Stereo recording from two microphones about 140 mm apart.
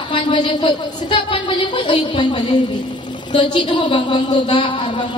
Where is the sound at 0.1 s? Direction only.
35° left (ahead or behind).